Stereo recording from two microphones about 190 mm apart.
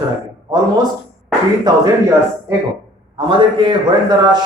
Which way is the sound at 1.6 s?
20° right (ahead or behind).